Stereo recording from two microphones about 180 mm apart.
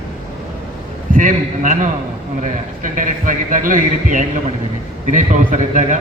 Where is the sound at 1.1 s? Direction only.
45° right (ahead or behind).